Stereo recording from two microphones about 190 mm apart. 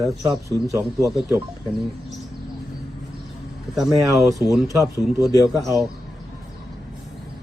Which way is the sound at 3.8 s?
Centre (ahead or behind).